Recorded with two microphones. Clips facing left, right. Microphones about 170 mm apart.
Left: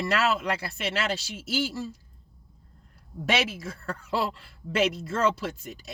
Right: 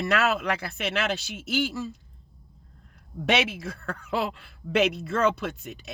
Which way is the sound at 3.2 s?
65° right (ahead or behind).